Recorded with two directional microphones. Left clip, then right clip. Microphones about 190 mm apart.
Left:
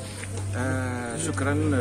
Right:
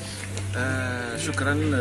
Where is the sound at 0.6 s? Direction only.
35° left (ahead or behind).